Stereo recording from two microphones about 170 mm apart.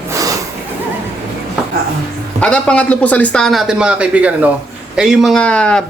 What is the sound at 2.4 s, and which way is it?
A man's voice, 5° left (ahead or behind).